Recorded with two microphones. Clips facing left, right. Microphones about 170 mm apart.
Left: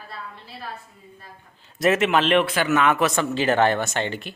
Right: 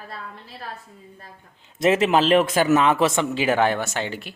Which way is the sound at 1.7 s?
25° right (ahead or behind).